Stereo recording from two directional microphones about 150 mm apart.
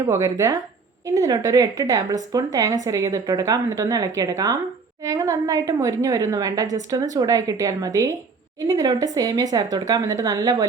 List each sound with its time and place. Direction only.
0.0 s speech: 20° right (ahead or behind)